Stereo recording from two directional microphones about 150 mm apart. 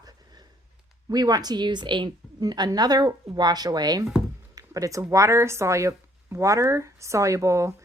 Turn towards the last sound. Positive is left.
turn(degrees=-20)  # may be behind; listen again after turning